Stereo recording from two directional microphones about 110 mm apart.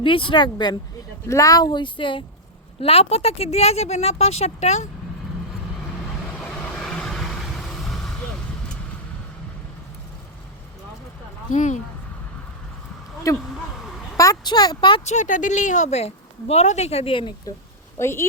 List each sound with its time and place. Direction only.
0.0 s speech: 50° left (ahead or behind)
1.3 s speech: 30° left (ahead or behind); by 2.2 s 50° left (ahead or behind)
2.8 s speech: 65° left (ahead or behind); by 4.9 s 85° left
6.4 s vehicle: 10° left (ahead or behind)
11.5 s speech: 90° left
13.3 s speech: 30° left (ahead or behind)
15.0 s a woman's voice: 90° left; by 17.3 s 55° left (ahead or behind)
17.9 s speech: 25° left (ahead or behind)